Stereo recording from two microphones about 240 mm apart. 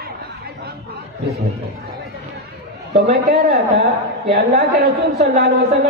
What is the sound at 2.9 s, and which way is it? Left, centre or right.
A woman's voice, right.